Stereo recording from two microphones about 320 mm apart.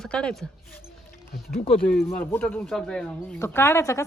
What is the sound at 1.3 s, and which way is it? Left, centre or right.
Speech, left.